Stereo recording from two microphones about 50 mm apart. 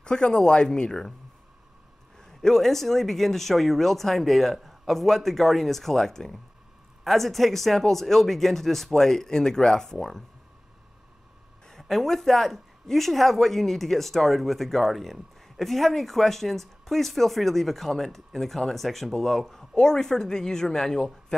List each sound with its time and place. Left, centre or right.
0.0 s speech: centre
2.1 s speech: centre
11.6 s speech: centre
19.7 s speech: centre